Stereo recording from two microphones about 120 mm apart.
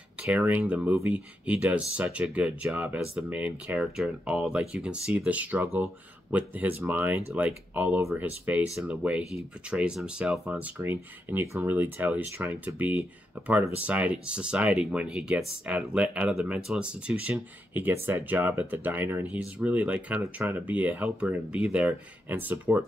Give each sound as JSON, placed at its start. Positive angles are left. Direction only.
{"t": 0.2, "sound": "speech", "side_deg": -15}
{"t": 8.7, "sound": "speech", "side_deg": -10}